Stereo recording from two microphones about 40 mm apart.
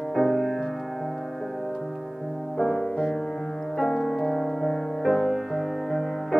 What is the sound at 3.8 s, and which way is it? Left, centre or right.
Music, centre.